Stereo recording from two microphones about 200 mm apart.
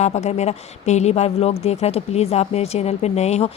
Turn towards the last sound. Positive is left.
turn(degrees=35)  # may be behind; listen again after turning